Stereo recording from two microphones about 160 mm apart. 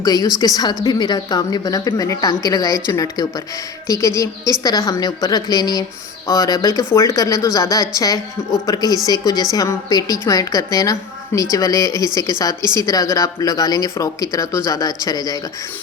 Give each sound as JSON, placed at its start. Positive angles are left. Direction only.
{"t": 0.0, "sound": "speech", "side_deg": 25}